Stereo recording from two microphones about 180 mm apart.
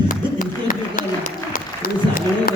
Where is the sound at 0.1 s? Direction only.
45° left (ahead or behind).